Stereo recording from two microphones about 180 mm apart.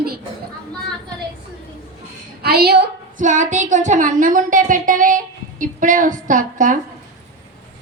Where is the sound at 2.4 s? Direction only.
60° right (ahead or behind).